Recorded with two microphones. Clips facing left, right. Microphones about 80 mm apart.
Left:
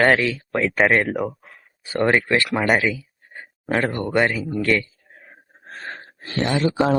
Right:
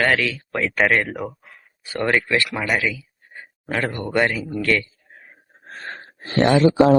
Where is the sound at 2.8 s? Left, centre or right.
Left.